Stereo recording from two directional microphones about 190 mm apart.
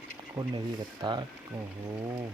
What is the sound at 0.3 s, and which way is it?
Speech, 20° right (ahead or behind).